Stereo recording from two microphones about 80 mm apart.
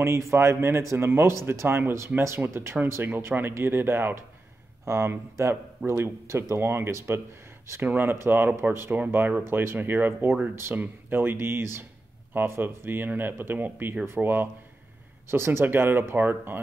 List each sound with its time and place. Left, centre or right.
0.0 s speech: right